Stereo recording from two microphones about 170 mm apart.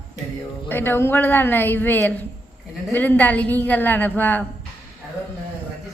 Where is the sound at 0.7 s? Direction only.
10° left (ahead or behind).